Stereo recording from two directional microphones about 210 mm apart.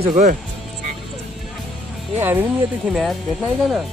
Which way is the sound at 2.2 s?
10° right (ahead or behind).